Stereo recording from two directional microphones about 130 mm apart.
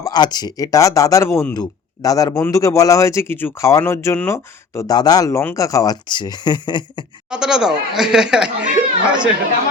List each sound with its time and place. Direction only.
0.0 s speech: 35° left (ahead or behind)
7.3 s speech: 5° right (ahead or behind)